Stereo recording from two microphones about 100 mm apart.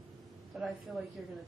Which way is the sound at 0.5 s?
Centre (ahead or behind).